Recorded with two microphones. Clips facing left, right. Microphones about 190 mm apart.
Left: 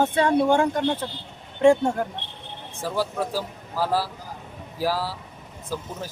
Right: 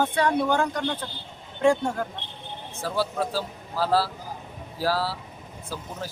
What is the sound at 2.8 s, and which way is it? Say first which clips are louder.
Speech: left 1 dB; 15° left (ahead or behind).